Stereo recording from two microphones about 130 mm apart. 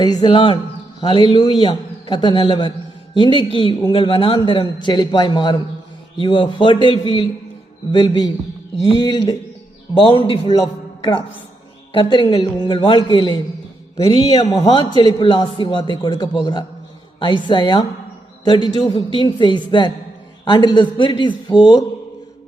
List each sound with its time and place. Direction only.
0.0 s a man's voice: 35° left (ahead or behind)
11.9 s a man's voice: 40° left (ahead or behind)
14.7 s a man's voice: 40° left (ahead or behind)